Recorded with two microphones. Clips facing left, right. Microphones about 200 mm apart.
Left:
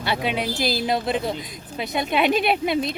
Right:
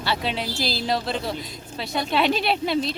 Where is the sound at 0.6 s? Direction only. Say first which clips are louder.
Left 4 dB; 50° left (ahead or behind).